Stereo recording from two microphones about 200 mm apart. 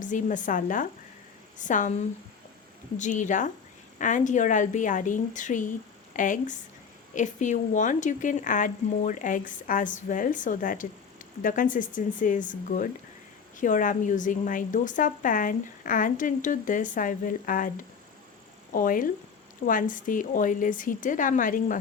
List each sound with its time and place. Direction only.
0.0 s a woman's voice: 40° left (ahead or behind)